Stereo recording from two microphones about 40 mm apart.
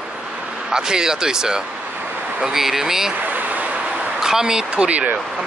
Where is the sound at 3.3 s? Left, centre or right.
Right.